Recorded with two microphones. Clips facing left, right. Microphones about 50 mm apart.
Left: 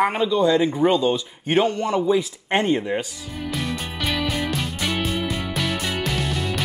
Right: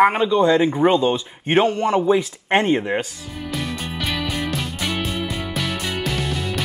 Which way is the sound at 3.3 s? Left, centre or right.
Centre.